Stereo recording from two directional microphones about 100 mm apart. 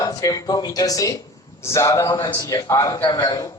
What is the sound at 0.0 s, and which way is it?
A man's voice, 35° left (ahead or behind).